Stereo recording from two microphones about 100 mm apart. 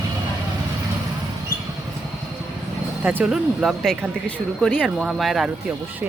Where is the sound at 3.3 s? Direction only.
Centre (ahead or behind).